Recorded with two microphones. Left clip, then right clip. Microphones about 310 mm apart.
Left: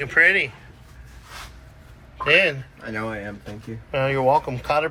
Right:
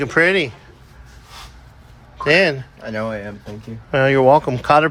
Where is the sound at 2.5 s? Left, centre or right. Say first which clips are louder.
Right 5 dB; right.